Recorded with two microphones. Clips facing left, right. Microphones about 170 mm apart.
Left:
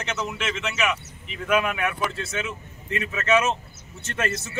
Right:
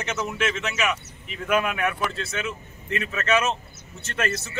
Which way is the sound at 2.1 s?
20° left (ahead or behind).